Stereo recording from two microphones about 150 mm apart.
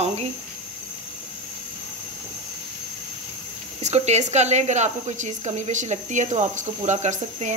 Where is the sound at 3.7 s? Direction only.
50° right (ahead or behind).